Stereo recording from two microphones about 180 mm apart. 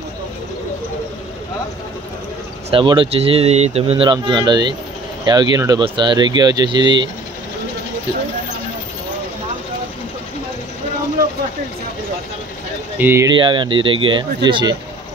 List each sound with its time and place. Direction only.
2.7 s speech: 25° right (ahead or behind)
13.0 s speech: 15° right (ahead or behind)
13.3 s speech: 25° right (ahead or behind)